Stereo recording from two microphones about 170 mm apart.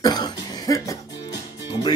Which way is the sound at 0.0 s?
25° left (ahead or behind).